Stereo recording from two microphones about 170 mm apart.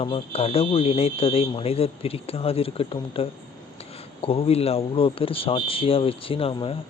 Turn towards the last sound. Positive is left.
turn(degrees=30)  # may be behind; listen again after turning